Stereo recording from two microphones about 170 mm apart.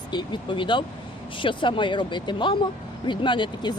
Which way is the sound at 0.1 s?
25° left (ahead or behind).